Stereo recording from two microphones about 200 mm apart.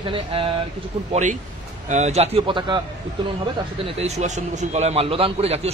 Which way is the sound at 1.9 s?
35° right (ahead or behind).